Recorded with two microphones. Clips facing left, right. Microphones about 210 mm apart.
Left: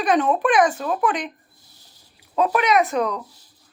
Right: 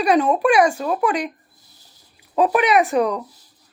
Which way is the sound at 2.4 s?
15° right (ahead or behind).